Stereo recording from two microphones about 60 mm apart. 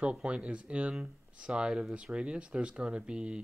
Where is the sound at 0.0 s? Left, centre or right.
Centre.